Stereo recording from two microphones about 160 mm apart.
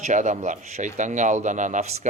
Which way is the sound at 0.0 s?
50° right (ahead or behind).